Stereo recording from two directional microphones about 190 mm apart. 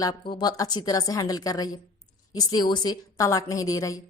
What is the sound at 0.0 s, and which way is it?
A woman's voice, 20° left (ahead or behind).